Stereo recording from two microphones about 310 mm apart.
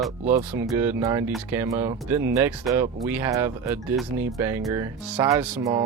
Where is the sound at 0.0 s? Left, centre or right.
Centre.